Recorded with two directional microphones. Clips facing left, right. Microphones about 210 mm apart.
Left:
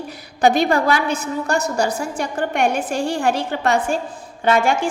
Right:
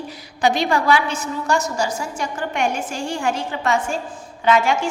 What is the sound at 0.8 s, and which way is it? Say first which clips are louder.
Speech: even; 40° left (ahead or behind).